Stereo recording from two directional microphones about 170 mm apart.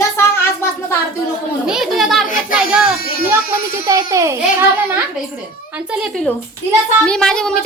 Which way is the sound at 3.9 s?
20° right (ahead or behind).